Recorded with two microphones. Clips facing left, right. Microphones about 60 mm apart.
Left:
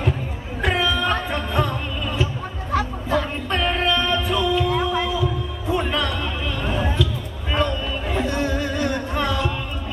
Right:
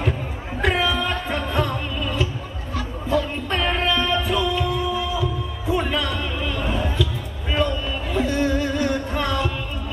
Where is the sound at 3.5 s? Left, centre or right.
Centre.